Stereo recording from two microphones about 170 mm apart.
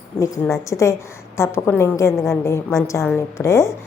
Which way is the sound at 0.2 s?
20° left (ahead or behind).